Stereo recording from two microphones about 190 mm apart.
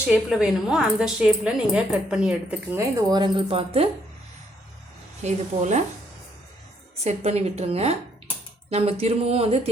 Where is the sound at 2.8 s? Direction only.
20° right (ahead or behind).